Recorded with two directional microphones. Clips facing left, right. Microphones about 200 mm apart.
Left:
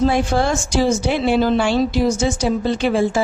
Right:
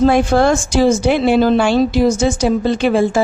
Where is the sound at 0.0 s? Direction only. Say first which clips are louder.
Right 5 dB; 55° right (ahead or behind).